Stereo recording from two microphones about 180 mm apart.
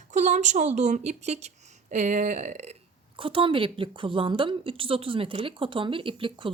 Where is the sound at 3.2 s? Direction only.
30° right (ahead or behind).